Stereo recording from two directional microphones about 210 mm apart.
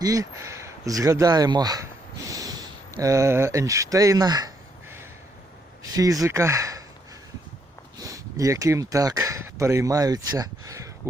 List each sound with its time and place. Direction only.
0.0 s speech: 15° right (ahead or behind)
7.9 s speech: 15° right (ahead or behind)